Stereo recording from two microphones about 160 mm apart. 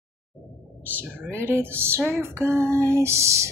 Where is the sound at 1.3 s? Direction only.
15° right (ahead or behind).